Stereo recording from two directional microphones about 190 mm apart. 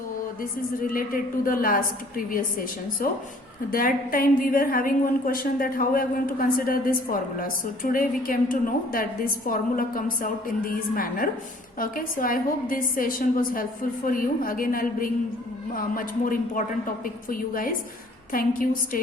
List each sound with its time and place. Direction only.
0.8 s a woman's voice: 45° left (ahead or behind)